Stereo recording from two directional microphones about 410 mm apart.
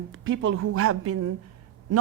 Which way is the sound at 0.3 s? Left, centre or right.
Right.